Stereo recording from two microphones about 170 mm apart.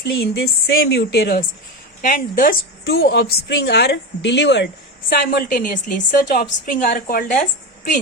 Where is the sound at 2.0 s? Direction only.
50° left (ahead or behind).